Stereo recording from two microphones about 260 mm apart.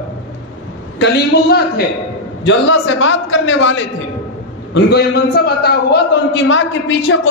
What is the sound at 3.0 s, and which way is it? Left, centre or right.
Speech, left.